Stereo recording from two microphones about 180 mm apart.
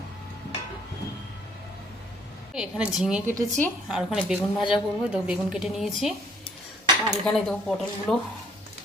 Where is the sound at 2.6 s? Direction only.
5° right (ahead or behind).